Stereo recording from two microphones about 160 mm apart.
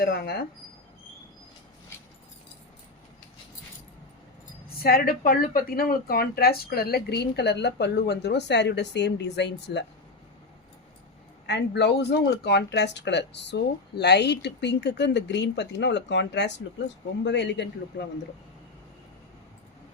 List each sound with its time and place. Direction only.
0.0 s speech: 75° left (ahead or behind)
4.8 s a woman's voice: 70° left (ahead or behind); by 9.8 s 90° left
11.4 s a woman's voice: 90° left